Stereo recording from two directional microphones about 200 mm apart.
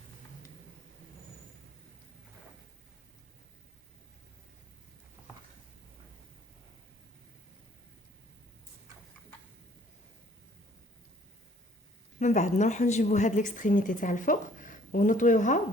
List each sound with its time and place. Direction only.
12.2 s a woman's voice: 35° left (ahead or behind)